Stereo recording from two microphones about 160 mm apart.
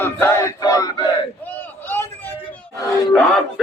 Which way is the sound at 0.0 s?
15° left (ahead or behind).